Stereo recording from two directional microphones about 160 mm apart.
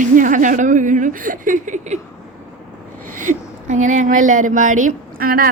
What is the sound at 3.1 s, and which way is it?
Speech, 50° right (ahead or behind).